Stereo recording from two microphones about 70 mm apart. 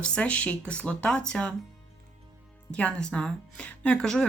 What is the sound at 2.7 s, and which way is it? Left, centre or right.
Speech, centre.